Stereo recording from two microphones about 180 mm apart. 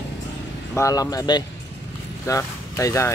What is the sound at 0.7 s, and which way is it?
Speech, 20° left (ahead or behind).